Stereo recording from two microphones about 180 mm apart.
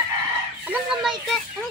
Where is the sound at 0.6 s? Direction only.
Centre (ahead or behind).